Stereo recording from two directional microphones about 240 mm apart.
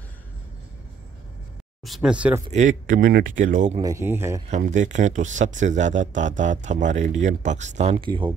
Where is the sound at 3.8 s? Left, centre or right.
Centre.